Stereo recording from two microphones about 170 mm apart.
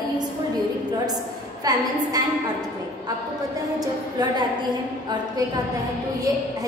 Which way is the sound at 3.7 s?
20° right (ahead or behind).